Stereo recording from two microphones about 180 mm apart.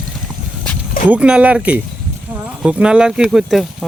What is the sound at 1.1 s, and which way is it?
Speech, 5° right (ahead or behind).